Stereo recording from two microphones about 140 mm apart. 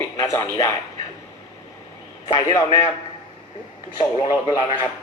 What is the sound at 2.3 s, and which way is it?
Speech, 30° left (ahead or behind).